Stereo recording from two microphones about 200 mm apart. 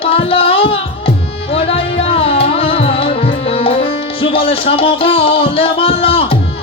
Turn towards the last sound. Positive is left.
turn(degrees=30)  # may be behind; listen again after turning